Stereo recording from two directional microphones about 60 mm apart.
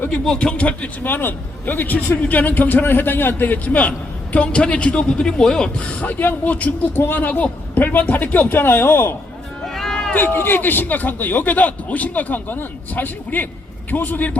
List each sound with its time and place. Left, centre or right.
0.1 s speech: centre; by 9.1 s left
9.6 s run: centre
10.2 s speech: left